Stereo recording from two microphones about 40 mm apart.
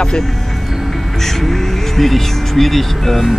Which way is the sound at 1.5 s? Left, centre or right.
Centre.